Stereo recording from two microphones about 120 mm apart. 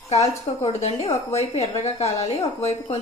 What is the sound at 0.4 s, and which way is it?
A woman's voice, 70° left (ahead or behind).